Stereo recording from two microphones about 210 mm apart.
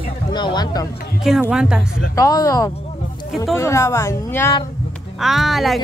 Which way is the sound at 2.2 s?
15° left (ahead or behind).